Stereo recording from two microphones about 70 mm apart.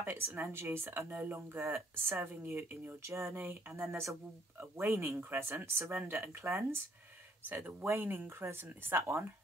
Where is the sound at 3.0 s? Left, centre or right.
Right.